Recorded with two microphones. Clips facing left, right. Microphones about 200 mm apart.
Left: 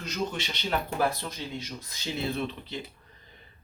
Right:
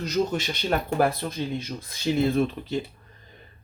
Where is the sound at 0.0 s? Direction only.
40° right (ahead or behind).